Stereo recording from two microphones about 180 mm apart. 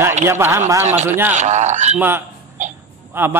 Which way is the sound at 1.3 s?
40° right (ahead or behind).